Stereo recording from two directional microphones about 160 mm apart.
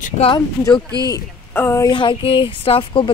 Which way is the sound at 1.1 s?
15° left (ahead or behind).